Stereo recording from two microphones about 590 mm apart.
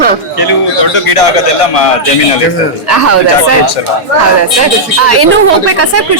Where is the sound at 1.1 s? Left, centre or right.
Left.